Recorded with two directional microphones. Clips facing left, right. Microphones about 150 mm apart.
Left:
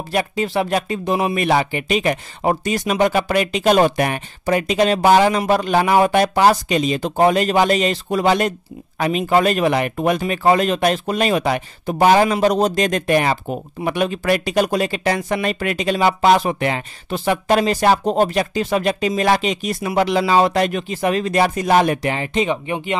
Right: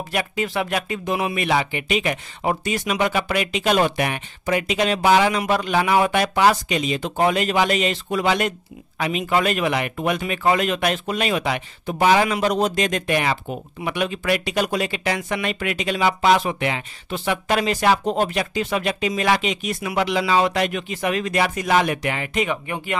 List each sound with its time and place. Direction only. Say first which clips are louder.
0.1 s speech: left 5 dB; 35° left (ahead or behind)